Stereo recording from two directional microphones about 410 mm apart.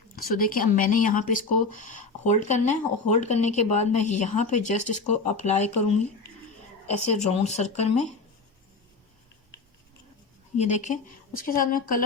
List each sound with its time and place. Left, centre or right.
0.2 s speech: left
6.8 s speech: centre
10.6 s speech: centre